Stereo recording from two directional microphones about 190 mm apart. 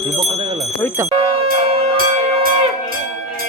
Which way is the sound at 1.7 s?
30° right (ahead or behind).